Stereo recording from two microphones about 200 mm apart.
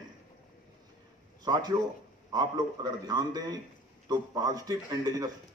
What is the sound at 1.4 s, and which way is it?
Speech, 20° right (ahead or behind).